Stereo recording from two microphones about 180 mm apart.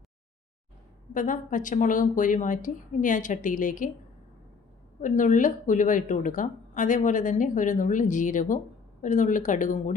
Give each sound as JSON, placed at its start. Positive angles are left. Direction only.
{"t": 1.1, "sound": "a woman's voice", "side_deg": 45}
{"t": 4.9, "sound": "a woman's voice", "side_deg": 45}